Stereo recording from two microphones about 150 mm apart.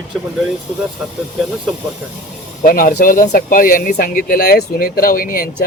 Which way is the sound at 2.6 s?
70° left (ahead or behind).